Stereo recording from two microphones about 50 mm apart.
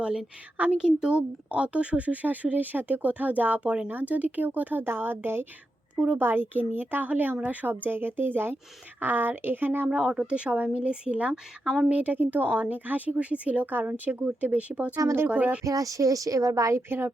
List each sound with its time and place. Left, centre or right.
0.8 s speech: centre
1.5 s speech: right
3.6 s speech: right
3.8 s speech: right
9.9 s speech: right
11.9 s speech: right
15.6 s speech: right